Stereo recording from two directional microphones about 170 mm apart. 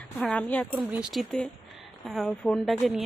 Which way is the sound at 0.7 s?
5° right (ahead or behind).